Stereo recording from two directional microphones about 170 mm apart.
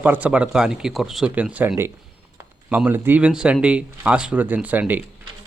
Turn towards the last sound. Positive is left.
turn(degrees=-10)  # may be behind; listen again after turning